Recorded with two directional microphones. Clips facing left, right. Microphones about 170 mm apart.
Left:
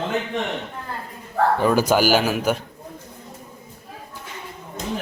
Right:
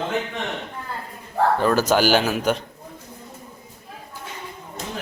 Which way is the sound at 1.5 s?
10° left (ahead or behind).